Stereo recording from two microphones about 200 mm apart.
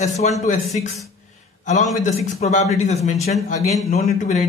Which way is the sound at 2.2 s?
35° left (ahead or behind).